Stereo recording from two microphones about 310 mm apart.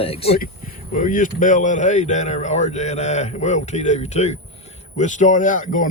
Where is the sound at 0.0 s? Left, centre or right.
Centre.